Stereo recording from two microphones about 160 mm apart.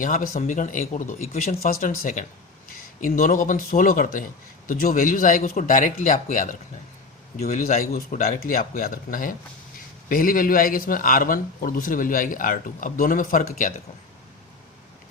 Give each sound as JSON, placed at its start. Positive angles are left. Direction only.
{"t": 0.0, "sound": "a man's voice", "side_deg": 55}
{"t": 7.4, "sound": "speech", "side_deg": 45}
{"t": 7.9, "sound": "a man's voice", "side_deg": 55}